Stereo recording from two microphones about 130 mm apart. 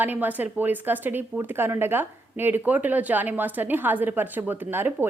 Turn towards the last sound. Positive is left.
turn(degrees=-15)  # may be behind; listen again after turning